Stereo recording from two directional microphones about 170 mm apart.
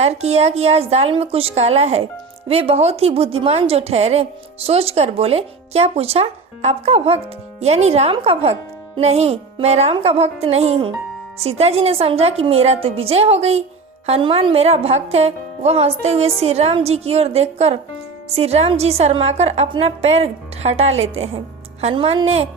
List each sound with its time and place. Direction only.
0.0 s a woman's voice: 40° right (ahead or behind)